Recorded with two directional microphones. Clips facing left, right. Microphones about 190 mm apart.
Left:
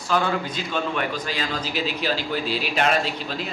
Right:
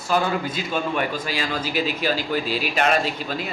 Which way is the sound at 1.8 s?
45° right (ahead or behind).